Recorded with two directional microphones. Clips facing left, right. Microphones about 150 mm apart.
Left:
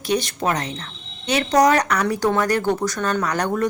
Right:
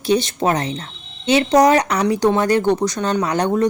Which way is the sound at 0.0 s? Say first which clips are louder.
Right 4 dB; 30° right (ahead or behind).